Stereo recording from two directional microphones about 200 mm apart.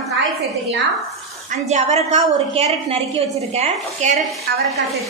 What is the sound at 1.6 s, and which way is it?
A woman's voice, 35° right (ahead or behind).